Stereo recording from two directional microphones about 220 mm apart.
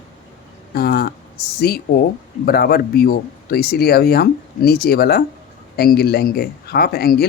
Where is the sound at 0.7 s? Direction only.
45° left (ahead or behind).